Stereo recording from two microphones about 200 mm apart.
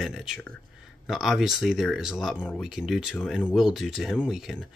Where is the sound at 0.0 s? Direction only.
Centre (ahead or behind).